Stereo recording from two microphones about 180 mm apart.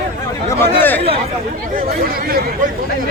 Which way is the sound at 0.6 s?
10° left (ahead or behind).